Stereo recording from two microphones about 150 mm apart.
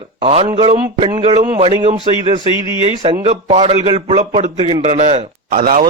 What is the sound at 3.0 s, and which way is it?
A man's voice, 35° right (ahead or behind).